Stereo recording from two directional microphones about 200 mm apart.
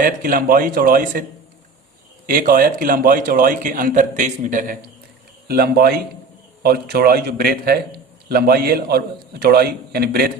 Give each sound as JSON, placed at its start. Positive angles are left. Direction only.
{"t": 0.0, "sound": "a man's voice", "side_deg": -45}
{"t": 2.2, "sound": "a man's voice", "side_deg": -45}